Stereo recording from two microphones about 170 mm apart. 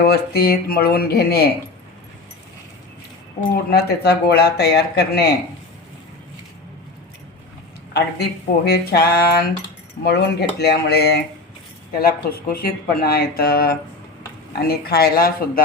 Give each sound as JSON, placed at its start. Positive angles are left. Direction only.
{"t": 0.0, "sound": "speech", "side_deg": 70}
{"t": 3.5, "sound": "speech", "side_deg": 70}
{"t": 7.9, "sound": "speech", "side_deg": 75}
{"t": 10.0, "sound": "speech", "side_deg": 75}